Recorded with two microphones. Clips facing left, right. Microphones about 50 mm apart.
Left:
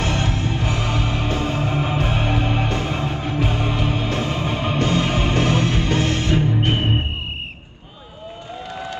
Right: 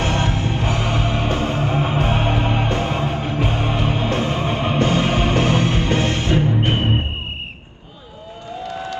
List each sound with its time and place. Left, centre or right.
0.0 s music: right